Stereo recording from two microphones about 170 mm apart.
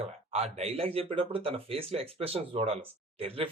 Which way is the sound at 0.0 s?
40° right (ahead or behind).